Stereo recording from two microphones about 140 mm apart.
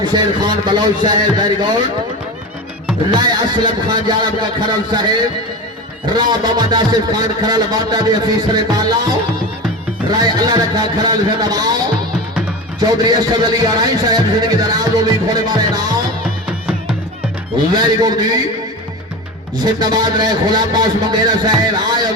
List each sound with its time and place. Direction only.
0.0 s a man's voice: 30° right (ahead or behind)
3.1 s a man's voice: 30° right (ahead or behind)
6.1 s speech: 30° right (ahead or behind)
10.2 s speech: 30° right (ahead or behind)
13.1 s speech: 30° right (ahead or behind)
17.7 s a man's voice: 30° right (ahead or behind)
19.6 s a man's voice: 30° right (ahead or behind)